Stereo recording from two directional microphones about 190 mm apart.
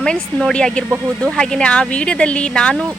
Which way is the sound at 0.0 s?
5° left (ahead or behind).